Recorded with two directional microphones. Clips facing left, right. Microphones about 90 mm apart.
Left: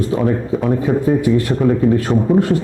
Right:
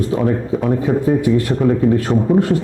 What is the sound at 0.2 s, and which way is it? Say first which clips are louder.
Speech: even; 25° left (ahead or behind).